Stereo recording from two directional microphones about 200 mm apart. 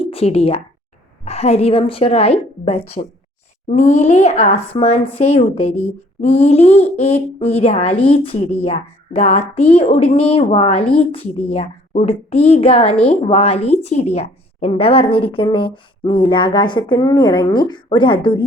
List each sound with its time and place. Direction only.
0.0 s a woman's voice: 30° left (ahead or behind)